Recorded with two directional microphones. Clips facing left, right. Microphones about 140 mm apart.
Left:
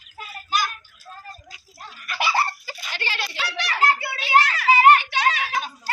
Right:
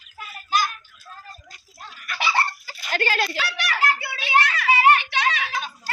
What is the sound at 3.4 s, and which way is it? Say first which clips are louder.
Hands: left 2 dB; 25° left (ahead or behind).